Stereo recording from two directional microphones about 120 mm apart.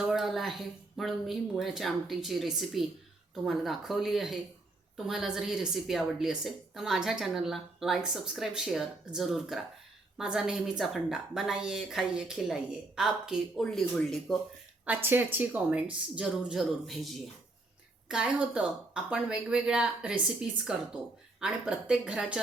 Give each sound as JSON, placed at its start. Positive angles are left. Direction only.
{"t": 0.0, "sound": "a woman's voice", "side_deg": 0}
{"t": 14.8, "sound": "a woman's voice", "side_deg": -15}